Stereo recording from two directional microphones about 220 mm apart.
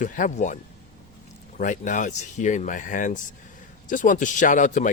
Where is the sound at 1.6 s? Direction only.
35° left (ahead or behind).